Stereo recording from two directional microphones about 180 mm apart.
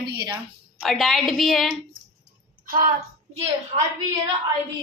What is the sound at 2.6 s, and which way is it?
Speech, 50° right (ahead or behind).